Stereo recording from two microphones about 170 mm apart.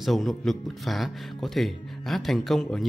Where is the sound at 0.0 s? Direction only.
Centre (ahead or behind).